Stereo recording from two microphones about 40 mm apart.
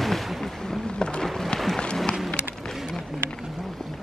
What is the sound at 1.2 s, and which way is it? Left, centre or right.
Run, centre.